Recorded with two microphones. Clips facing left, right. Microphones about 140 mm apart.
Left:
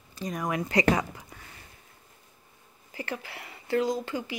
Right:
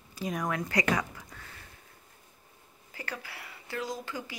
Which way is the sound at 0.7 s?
25° left (ahead or behind).